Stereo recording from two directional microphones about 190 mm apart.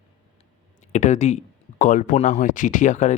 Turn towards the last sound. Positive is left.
turn(degrees=40)  # may be behind; listen again after turning